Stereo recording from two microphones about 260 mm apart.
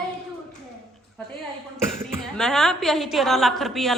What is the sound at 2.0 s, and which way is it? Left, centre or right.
Speech, centre.